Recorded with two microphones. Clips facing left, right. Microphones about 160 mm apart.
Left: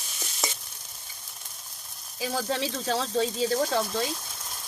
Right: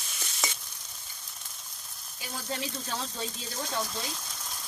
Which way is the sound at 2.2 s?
90° left.